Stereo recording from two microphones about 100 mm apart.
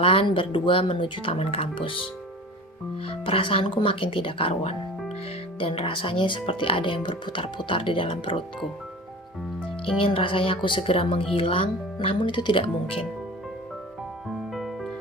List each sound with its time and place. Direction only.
0.0 s speech: 65° left (ahead or behind)
9.8 s speech: 65° left (ahead or behind)
14.5 s music: centre (ahead or behind)